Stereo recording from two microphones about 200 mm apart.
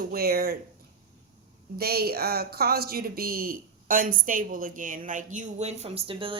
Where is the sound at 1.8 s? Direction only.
50° right (ahead or behind).